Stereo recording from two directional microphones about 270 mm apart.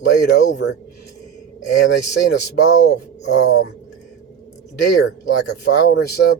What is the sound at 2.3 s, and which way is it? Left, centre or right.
Speech, left.